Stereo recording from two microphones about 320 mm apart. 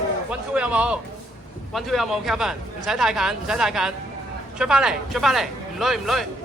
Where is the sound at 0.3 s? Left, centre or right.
Centre.